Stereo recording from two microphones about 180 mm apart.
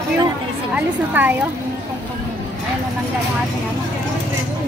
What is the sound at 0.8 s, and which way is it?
Speech, 10° right (ahead or behind).